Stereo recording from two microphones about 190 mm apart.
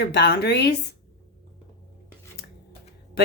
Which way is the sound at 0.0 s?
60° left (ahead or behind).